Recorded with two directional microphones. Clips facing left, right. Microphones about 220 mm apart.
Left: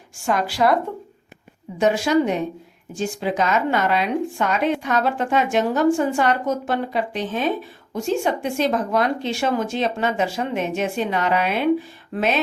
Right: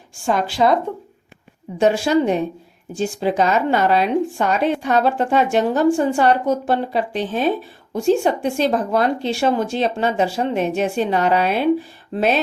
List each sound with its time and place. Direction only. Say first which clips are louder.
0.3 s speech: right 2 dB; 25° right (ahead or behind)
1.8 s speech: right 2 dB; 30° right (ahead or behind)